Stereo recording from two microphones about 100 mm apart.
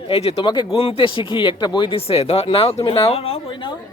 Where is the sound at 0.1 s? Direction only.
90° left.